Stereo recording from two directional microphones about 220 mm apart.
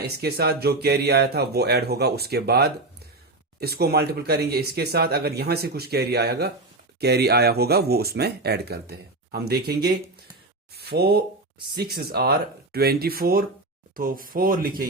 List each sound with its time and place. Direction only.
0.0 s speech: 45° right (ahead or behind)